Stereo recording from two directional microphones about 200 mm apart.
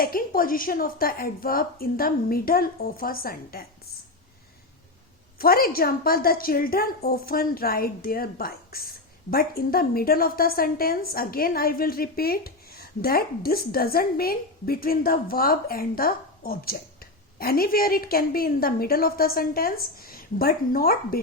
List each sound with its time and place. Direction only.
0.0 s a woman's voice: 45° left (ahead or behind)
5.4 s a woman's voice: 50° left (ahead or behind)